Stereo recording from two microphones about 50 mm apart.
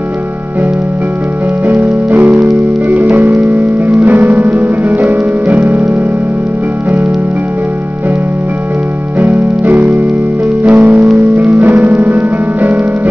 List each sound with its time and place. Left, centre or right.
1.7 s music: right
9.3 s music: right